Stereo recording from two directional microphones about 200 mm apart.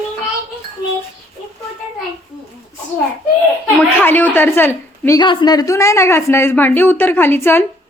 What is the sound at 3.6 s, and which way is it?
Speech, 10° left (ahead or behind).